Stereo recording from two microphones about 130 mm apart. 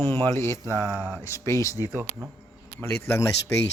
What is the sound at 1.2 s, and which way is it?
Speech, 20° left (ahead or behind).